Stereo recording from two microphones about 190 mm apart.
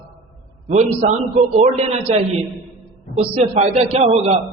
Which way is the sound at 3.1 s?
30° right (ahead or behind).